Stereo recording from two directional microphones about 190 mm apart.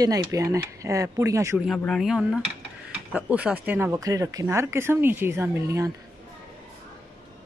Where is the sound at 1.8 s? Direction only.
Centre (ahead or behind); by 5.9 s 15° right (ahead or behind).